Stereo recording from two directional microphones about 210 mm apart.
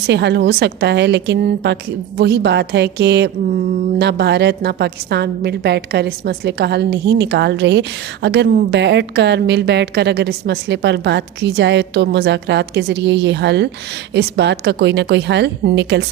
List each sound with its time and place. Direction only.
0.1 s a woman's voice: 55° right (ahead or behind)